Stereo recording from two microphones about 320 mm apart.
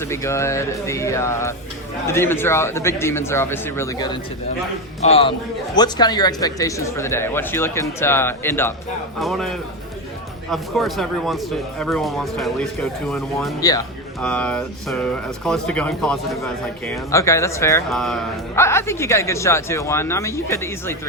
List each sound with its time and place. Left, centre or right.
0.0 s speech: centre